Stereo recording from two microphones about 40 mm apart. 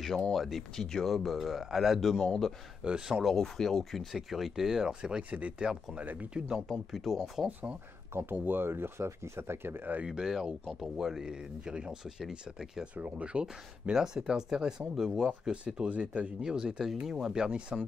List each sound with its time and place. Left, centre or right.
0.3 s speech: centre
1.0 s speech: centre
2.0 s speech: centre
2.8 s speech: right
3.3 s speech: centre
4.1 s speech: centre; by 6.6 s right
6.9 s speech: centre
7.4 s speech: right
8.1 s speech: right
10.0 s speech: centre
12.8 s speech: right
13.9 s speech: centre
15.5 s speech: right
16.3 s speech: centre